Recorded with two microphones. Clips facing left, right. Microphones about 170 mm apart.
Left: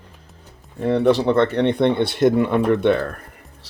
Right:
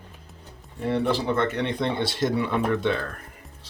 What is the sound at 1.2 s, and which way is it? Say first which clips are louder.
Speech: left 8 dB; 65° left (ahead or behind).